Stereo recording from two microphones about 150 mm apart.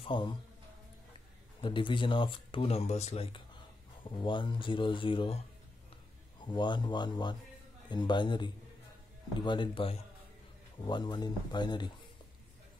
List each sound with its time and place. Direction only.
0.0 s speech: 35° left (ahead or behind)
1.6 s speech: 35° left (ahead or behind)
2.9 s speech: 45° left (ahead or behind)
4.0 s speech: 30° left (ahead or behind)
6.4 s speech: 30° left (ahead or behind)